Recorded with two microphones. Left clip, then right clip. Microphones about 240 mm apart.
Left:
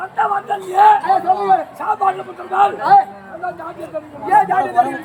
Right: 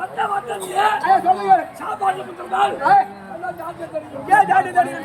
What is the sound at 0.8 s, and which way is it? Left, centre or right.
Speech, centre.